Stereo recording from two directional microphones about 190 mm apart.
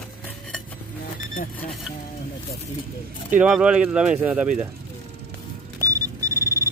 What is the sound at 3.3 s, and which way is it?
Speech, 5° right (ahead or behind).